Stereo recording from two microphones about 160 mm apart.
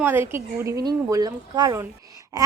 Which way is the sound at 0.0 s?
15° right (ahead or behind).